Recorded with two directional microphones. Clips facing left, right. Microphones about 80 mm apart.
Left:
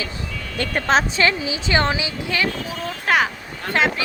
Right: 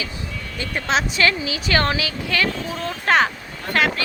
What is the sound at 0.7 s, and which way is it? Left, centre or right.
Speech, left.